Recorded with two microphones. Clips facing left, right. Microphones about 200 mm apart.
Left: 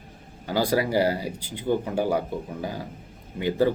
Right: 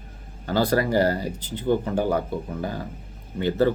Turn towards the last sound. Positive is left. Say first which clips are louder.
# right 1 dB
turn(degrees=10)  # may be behind; listen again after turning